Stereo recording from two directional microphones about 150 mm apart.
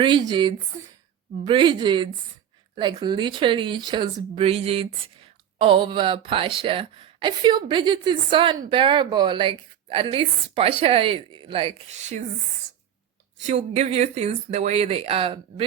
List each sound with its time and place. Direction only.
0.0 s speech: 30° right (ahead or behind)
13.5 s speech: 45° right (ahead or behind)